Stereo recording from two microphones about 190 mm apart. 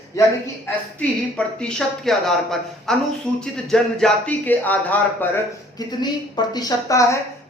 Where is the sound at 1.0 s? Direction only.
5° left (ahead or behind).